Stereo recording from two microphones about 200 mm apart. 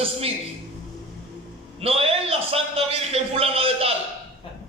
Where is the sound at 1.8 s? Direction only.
30° right (ahead or behind).